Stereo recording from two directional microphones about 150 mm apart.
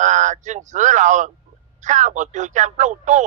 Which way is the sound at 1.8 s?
55° right (ahead or behind).